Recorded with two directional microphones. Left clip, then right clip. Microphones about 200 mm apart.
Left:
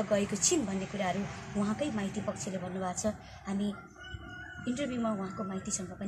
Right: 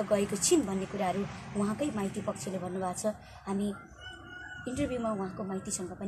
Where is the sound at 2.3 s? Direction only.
35° right (ahead or behind).